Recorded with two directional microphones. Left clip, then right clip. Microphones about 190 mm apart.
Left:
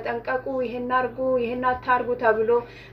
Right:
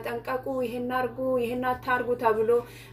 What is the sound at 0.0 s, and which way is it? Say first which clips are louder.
Speech: left 4 dB; 15° right (ahead or behind).